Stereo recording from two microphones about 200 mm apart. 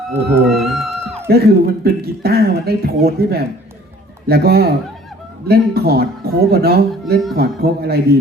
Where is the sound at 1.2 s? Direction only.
50° right (ahead or behind).